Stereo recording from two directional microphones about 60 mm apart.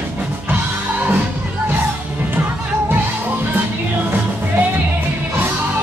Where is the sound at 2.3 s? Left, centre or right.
Right.